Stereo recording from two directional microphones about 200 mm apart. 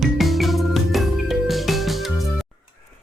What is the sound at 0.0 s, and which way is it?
Music, centre (ahead or behind).